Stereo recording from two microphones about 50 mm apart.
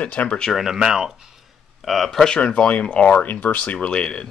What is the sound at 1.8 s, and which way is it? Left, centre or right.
Speech, centre.